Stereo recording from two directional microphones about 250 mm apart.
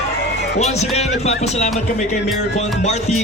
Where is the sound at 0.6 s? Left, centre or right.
Left.